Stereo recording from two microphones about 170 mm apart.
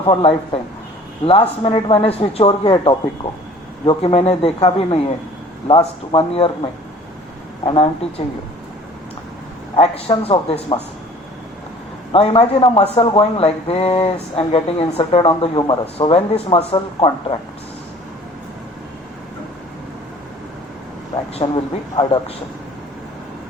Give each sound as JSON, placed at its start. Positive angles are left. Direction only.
{"t": 0.0, "sound": "speech", "side_deg": 30}
{"t": 9.7, "sound": "speech", "side_deg": 35}
{"t": 12.1, "sound": "speech", "side_deg": 35}
{"t": 21.3, "sound": "speech", "side_deg": 30}